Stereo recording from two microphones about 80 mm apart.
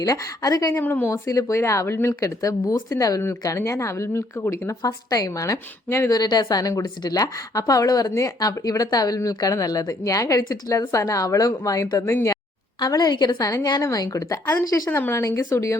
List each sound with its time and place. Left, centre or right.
0.0 s speech: left
0.7 s a woman's voice: left
1.0 s speech: left
6.1 s speech: left
12.8 s a woman's voice: left
13.5 s speech: left
14.8 s a woman's voice: left
15.1 s speech: left